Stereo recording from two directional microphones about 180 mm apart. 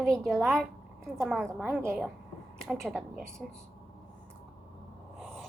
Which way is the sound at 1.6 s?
15° right (ahead or behind).